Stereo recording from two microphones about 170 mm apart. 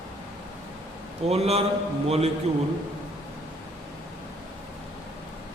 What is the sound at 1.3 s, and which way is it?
Speech, 35° right (ahead or behind).